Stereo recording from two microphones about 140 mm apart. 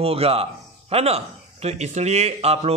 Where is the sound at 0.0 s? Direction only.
45° right (ahead or behind).